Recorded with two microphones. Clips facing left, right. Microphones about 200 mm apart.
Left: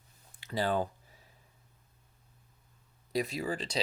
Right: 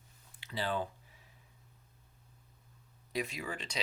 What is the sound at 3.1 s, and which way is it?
Speech, 35° left (ahead or behind).